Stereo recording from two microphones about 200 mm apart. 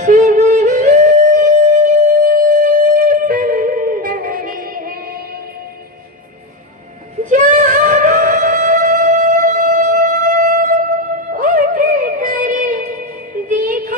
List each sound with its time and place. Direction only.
0.0 s music: 40° right (ahead or behind)
7.2 s music: 40° right (ahead or behind)